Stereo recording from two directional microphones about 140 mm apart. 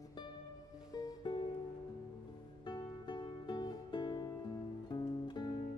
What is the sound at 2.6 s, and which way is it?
Music, 30° left (ahead or behind).